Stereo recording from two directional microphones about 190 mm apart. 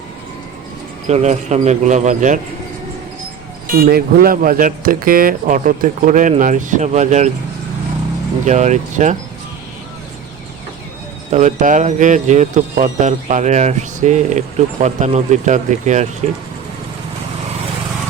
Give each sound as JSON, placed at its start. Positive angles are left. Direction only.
{"t": 1.0, "sound": "speech", "side_deg": -35}
{"t": 3.7, "sound": "speech", "side_deg": -50}
{"t": 8.4, "sound": "speech", "side_deg": -40}
{"t": 11.3, "sound": "speech", "side_deg": -40}